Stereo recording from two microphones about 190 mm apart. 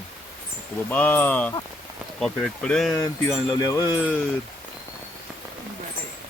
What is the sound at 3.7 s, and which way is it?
Speech, 20° left (ahead or behind).